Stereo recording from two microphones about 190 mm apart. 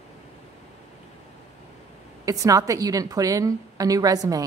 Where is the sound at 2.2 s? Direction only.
15° right (ahead or behind).